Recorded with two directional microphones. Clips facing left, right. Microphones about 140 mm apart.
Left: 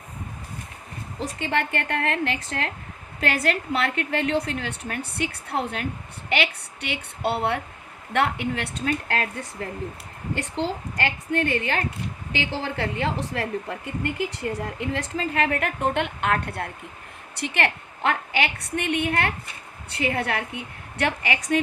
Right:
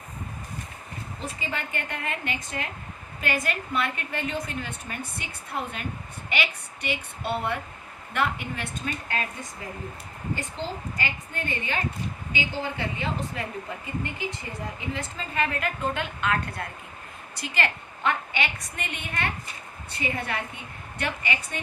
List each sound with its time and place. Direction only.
1.2 s a woman's voice: 75° left (ahead or behind)
10.3 s a woman's voice: 75° left (ahead or behind)
14.0 s a woman's voice: 85° left
21.0 s a woman's voice: 85° left